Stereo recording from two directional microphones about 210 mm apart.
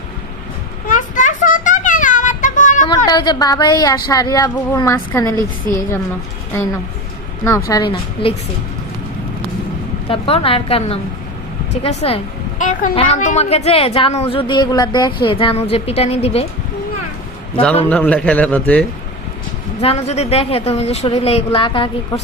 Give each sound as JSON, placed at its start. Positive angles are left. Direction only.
{"t": 0.9, "sound": "a sound", "side_deg": 40}
{"t": 3.1, "sound": "a woman's voice", "side_deg": 20}
{"t": 7.7, "sound": "a woman's voice", "side_deg": 20}
{"t": 10.1, "sound": "a woman's voice", "side_deg": 25}
{"t": 17.8, "sound": "a woman's voice", "side_deg": 5}
{"t": 19.8, "sound": "a woman's voice", "side_deg": 30}